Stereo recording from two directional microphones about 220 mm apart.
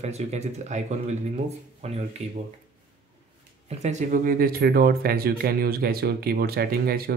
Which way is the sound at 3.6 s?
30° right (ahead or behind).